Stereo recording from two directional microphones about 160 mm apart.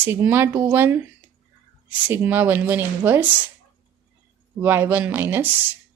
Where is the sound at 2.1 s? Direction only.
10° right (ahead or behind).